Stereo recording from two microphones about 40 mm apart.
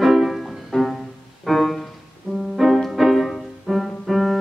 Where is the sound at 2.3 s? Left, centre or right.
Centre.